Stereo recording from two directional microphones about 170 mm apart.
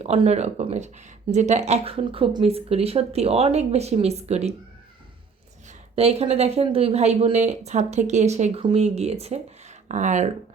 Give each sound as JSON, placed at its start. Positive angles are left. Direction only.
{"t": 0.0, "sound": "speech", "side_deg": -35}
{"t": 6.0, "sound": "speech", "side_deg": -35}